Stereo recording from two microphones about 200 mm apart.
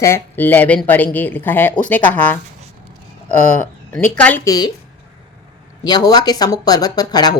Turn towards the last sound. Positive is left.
turn(degrees=20)  # may be behind; listen again after turning